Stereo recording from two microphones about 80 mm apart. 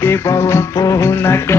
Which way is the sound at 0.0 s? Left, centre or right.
Left.